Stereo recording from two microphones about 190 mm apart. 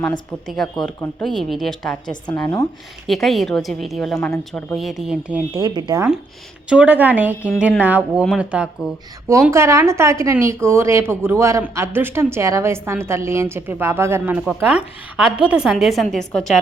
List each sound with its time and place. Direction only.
0.0 s a woman's voice: 5° left (ahead or behind)
2.3 s speech: 10° left (ahead or behind)
3.1 s a woman's voice: centre (ahead or behind)
5.6 s speech: 20° right (ahead or behind)
6.7 s a woman's voice: 5° right (ahead or behind)